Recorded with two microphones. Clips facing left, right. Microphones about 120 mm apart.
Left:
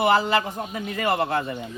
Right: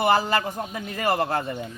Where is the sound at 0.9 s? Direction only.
35° right (ahead or behind).